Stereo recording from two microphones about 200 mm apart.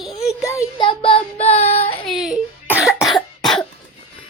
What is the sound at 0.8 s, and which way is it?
Child singing, 25° left (ahead or behind).